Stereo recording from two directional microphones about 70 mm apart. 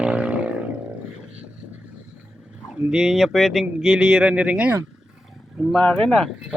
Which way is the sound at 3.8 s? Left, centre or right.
Centre.